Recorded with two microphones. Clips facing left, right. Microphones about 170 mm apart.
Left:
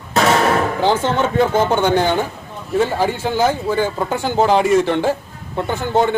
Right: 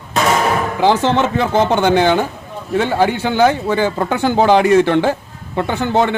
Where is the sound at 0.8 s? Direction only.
80° right.